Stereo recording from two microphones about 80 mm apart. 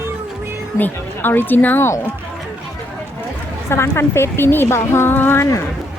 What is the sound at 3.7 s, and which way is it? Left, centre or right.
Speech, left.